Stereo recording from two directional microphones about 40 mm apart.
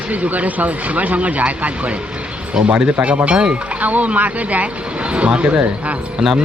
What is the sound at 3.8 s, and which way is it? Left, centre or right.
Speech, right.